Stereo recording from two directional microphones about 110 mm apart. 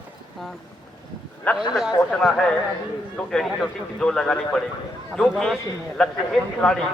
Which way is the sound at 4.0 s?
5° left (ahead or behind).